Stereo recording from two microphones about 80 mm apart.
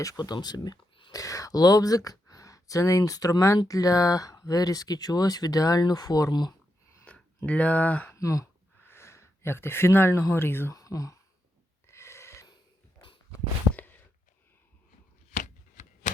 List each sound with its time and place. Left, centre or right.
0.0 s speech: left
1.1 s speech: left
7.0 s a sound: centre
8.1 s speech: left
10.7 s speech: left
11.9 s a sound: left